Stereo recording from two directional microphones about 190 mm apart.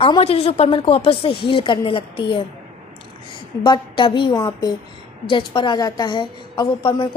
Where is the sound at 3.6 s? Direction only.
25° left (ahead or behind).